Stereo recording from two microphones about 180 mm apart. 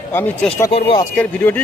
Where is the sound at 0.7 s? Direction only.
30° left (ahead or behind).